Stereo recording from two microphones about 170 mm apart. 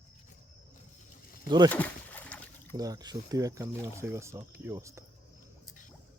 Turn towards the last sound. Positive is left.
turn(degrees=-15)  # may be behind; listen again after turning